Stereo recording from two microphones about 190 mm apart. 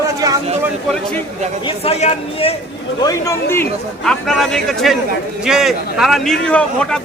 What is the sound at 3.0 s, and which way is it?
Speech, 15° left (ahead or behind).